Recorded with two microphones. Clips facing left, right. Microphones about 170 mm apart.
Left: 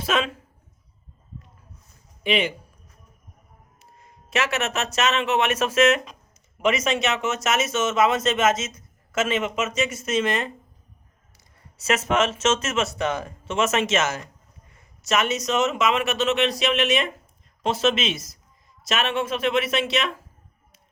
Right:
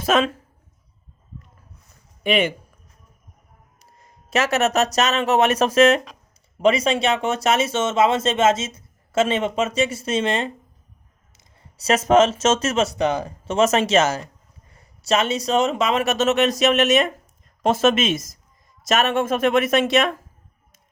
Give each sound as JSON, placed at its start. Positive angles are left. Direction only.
{"t": 0.0, "sound": "a man's voice", "side_deg": -45}
{"t": 2.2, "sound": "a man's voice", "side_deg": -50}
{"t": 4.3, "sound": "speech", "side_deg": -40}
{"t": 11.8, "sound": "a man's voice", "side_deg": -35}